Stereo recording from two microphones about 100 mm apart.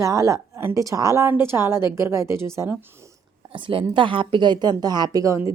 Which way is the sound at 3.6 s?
60° right (ahead or behind).